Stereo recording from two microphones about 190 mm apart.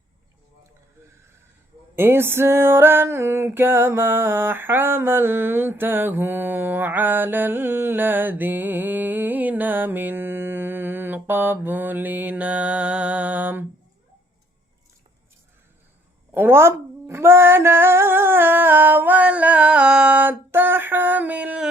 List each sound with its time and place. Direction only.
2.0 s music: 10° right (ahead or behind)
16.3 s speech: 10° right (ahead or behind)